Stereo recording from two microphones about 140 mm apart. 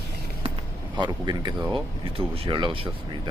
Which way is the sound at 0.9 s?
30° right (ahead or behind).